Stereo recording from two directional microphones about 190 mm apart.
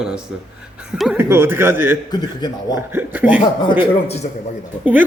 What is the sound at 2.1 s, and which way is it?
Speech, 20° left (ahead or behind).